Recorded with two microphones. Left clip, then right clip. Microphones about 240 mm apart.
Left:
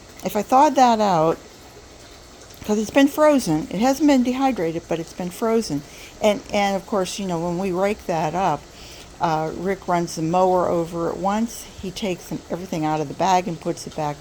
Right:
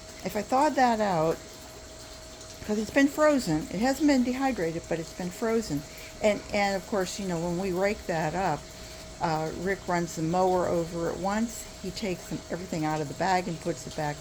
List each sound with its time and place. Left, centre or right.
0.2 s a woman's voice: left
2.6 s a woman's voice: left